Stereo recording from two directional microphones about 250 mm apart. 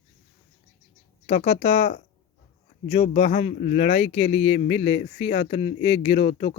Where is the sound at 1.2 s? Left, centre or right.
Left.